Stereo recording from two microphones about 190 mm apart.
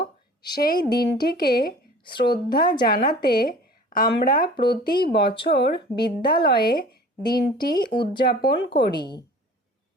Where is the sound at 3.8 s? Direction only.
45° left (ahead or behind).